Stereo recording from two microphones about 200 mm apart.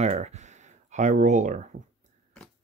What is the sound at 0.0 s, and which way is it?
Speech, 35° right (ahead or behind).